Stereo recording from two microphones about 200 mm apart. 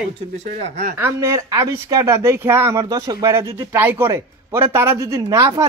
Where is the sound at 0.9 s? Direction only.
15° right (ahead or behind).